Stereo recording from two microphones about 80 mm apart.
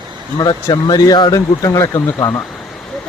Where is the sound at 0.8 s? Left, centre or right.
Left.